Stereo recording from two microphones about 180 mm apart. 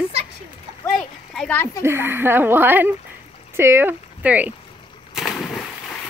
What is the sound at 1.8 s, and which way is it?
Speech, 10° right (ahead or behind).